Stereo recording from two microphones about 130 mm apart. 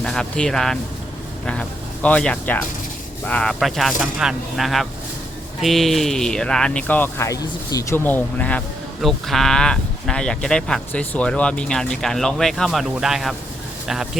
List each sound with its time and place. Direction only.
0.0 s speech: 5° left (ahead or behind)
7.3 s speech: 25° left (ahead or behind); by 14.1 s 5° right (ahead or behind)